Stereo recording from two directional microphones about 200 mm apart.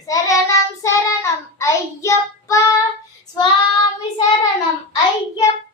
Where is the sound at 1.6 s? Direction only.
15° left (ahead or behind).